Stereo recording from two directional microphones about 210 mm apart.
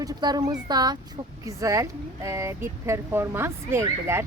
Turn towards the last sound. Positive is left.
turn(degrees=-15)  # may be behind; listen again after turning